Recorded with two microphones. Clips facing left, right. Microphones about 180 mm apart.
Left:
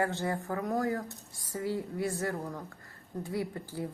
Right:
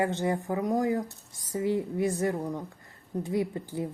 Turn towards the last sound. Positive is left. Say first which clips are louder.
# right 5 dB
turn(degrees=-20)  # may be behind; listen again after turning